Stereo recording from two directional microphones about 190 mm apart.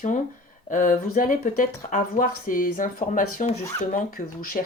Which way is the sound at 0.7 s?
45° left (ahead or behind).